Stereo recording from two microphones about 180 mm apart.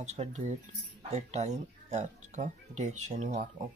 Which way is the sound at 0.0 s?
40° right (ahead or behind).